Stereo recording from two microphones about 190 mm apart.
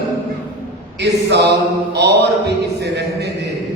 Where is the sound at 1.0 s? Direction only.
60° right (ahead or behind).